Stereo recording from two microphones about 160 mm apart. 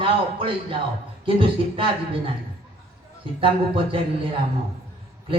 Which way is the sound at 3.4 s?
35° right (ahead or behind).